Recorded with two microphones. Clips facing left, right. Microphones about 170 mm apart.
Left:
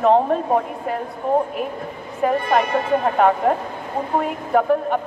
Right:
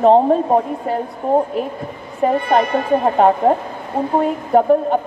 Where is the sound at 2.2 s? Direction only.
30° right (ahead or behind).